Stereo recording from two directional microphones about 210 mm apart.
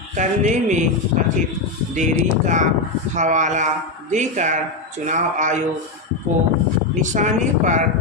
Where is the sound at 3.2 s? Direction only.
35° right (ahead or behind).